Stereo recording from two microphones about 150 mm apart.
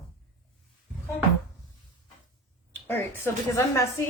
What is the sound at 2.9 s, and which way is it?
Speech, 15° left (ahead or behind).